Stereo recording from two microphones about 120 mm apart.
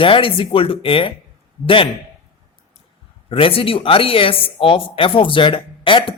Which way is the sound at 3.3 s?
50° left (ahead or behind).